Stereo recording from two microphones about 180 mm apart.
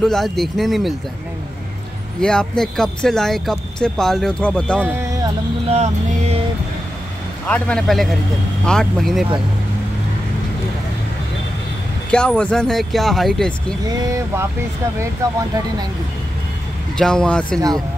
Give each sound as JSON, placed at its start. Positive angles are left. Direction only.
{"t": 0.0, "sound": "speech", "side_deg": 0}
{"t": 2.1, "sound": "speech", "side_deg": 5}
{"t": 4.7, "sound": "speech", "side_deg": -10}
{"t": 5.7, "sound": "music", "side_deg": -35}
{"t": 7.4, "sound": "speech", "side_deg": 5}
{"t": 12.1, "sound": "speech", "side_deg": 5}
{"t": 13.8, "sound": "speech", "side_deg": -20}
{"t": 16.9, "sound": "speech", "side_deg": 5}